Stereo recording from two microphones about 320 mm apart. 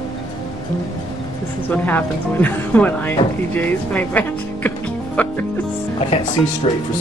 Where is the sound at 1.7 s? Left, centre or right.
Centre.